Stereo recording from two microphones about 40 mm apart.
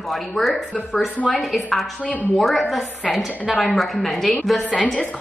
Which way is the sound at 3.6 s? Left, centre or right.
Centre.